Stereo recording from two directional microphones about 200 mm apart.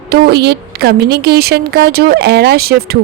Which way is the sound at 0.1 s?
55° right (ahead or behind).